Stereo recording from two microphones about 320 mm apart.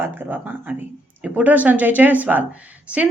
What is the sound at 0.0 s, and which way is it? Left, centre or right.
Speech, centre.